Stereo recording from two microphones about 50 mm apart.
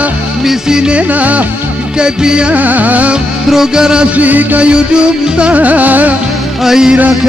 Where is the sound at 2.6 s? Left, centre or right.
Right.